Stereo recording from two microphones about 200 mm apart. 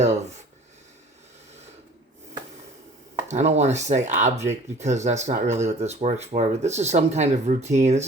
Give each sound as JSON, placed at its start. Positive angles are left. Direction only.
{"t": 0.0, "sound": "speech", "side_deg": -35}
{"t": 3.2, "sound": "speech", "side_deg": -35}